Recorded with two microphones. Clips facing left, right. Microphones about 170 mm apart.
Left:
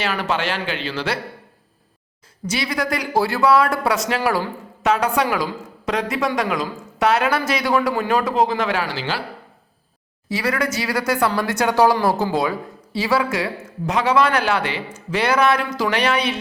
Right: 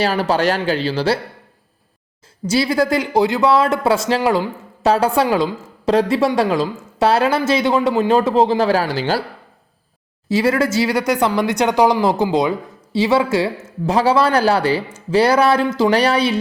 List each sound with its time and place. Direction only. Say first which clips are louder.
0.0 s speech: right 6 dB; 35° right (ahead or behind)
2.5 s speech: right 7 dB; 30° right (ahead or behind)
10.2 s speech: right 6 dB; 25° right (ahead or behind)